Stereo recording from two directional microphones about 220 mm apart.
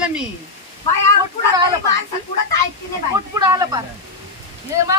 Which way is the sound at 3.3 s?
15° right (ahead or behind).